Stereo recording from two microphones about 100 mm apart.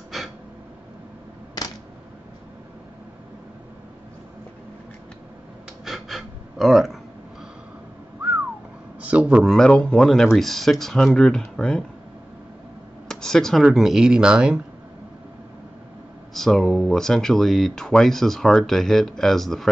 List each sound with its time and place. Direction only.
0.1 s a sound: centre (ahead or behind)
5.9 s pant: centre (ahead or behind)
9.0 s a man's voice: 15° right (ahead or behind)
9.5 s speech: 5° left (ahead or behind)
13.1 s speech: 5° left (ahead or behind)
16.3 s speech: centre (ahead or behind)